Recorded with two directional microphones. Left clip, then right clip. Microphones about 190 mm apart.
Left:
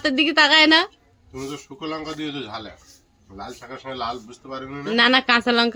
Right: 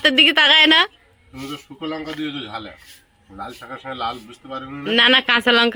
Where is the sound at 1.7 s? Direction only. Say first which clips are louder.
Right 2 dB; 25° left (ahead or behind).